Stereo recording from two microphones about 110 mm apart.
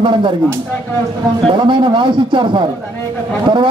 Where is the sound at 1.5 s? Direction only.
50° right (ahead or behind).